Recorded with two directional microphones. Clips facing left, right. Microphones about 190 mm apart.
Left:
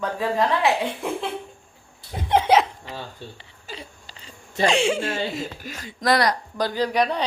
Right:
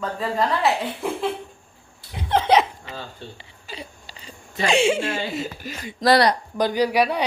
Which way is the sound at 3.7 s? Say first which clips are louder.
Right 1 dB; 10° right (ahead or behind).